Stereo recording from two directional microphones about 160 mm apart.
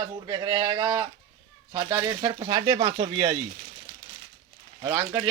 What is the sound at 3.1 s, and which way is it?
Speech, 25° right (ahead or behind).